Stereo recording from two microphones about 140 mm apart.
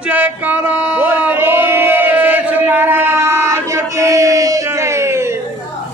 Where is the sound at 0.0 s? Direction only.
10° right (ahead or behind).